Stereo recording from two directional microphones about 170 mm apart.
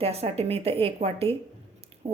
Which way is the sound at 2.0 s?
40° right (ahead or behind).